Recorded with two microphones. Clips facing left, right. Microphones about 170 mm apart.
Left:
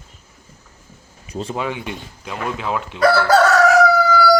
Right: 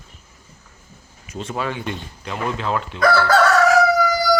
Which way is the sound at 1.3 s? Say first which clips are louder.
Left 3 dB; 30° left (ahead or behind).